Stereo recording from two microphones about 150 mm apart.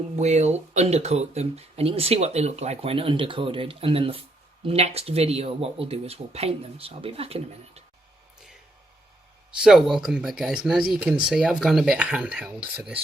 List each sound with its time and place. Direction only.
0.2 s speech: 50° right (ahead or behind)
9.5 s speech: 5° right (ahead or behind)